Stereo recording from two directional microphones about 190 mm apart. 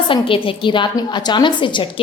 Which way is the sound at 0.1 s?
30° left (ahead or behind).